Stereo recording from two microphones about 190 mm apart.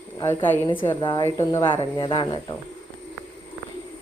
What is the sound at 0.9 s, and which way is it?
Speech, 25° left (ahead or behind).